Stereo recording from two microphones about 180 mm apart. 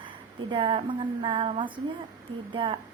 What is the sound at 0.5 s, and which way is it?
A woman's voice, 30° right (ahead or behind).